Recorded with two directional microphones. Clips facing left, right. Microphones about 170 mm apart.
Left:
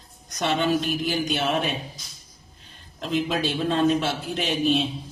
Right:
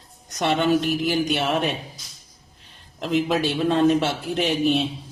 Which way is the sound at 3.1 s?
70° right (ahead or behind).